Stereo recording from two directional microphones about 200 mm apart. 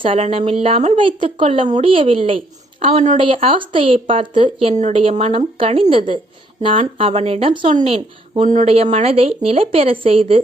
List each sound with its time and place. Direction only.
0.0 s a woman's voice: 30° right (ahead or behind)
3.2 s speech: 25° right (ahead or behind)